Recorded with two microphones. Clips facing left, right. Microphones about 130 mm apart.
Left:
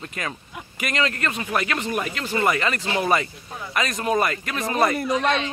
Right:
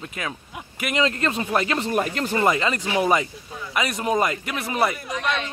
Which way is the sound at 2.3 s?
20° right (ahead or behind).